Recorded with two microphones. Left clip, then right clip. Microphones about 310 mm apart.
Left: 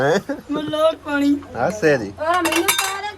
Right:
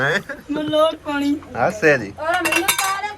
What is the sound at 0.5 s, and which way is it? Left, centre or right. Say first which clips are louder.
Speech: right 5 dB; centre.